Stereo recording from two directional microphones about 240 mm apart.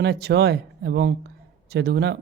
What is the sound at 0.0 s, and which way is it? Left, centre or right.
Speech, right.